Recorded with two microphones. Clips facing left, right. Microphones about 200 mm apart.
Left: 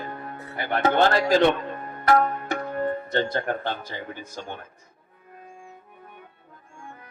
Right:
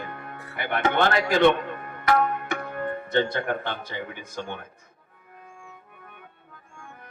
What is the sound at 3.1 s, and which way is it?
A man's voice, 60° right (ahead or behind).